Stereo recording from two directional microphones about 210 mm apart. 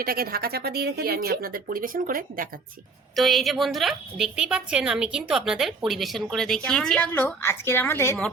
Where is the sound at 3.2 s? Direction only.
Centre (ahead or behind).